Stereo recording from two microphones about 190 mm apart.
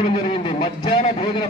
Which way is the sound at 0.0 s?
25° left (ahead or behind).